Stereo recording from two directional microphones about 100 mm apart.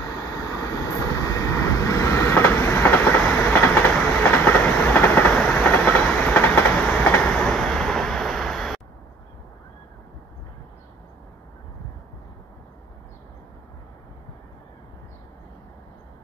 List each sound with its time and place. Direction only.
0.1 s vehicle: 35° left (ahead or behind); by 5.4 s 20° left (ahead or behind)
5.4 s train: 10° left (ahead or behind)